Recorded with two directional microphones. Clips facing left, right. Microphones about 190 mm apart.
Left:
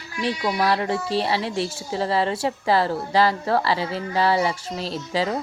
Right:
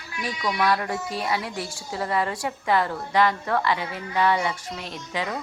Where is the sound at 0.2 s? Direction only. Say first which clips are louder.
Left 3 dB; 30° left (ahead or behind).